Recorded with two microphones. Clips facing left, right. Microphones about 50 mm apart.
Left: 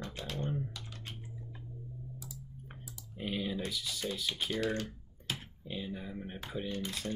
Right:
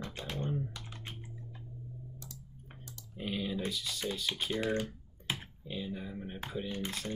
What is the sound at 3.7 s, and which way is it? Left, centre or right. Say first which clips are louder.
Speech: even; centre.